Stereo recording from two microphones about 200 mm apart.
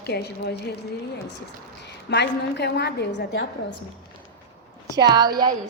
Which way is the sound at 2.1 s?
60° left (ahead or behind).